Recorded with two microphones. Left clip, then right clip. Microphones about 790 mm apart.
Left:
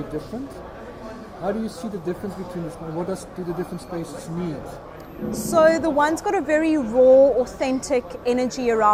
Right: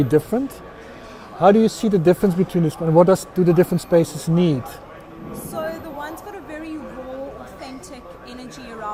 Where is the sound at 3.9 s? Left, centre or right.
Right.